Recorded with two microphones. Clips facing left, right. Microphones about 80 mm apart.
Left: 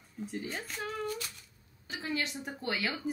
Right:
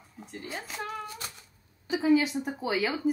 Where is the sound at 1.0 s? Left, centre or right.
Right.